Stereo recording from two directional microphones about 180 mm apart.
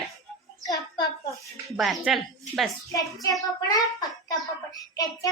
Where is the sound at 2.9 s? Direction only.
20° left (ahead or behind).